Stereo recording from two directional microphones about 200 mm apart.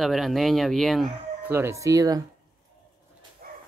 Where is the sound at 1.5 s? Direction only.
15° right (ahead or behind).